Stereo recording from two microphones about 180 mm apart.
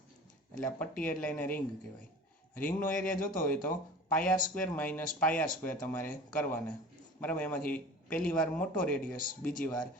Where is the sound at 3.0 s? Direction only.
50° left (ahead or behind).